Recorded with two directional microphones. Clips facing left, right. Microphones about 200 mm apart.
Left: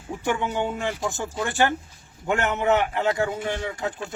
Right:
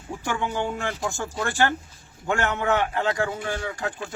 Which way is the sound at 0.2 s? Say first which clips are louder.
Left 2 dB; 20° left (ahead or behind).